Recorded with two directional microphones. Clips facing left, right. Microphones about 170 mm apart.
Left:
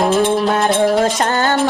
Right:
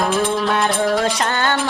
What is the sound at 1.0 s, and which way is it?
Music, 40° left (ahead or behind).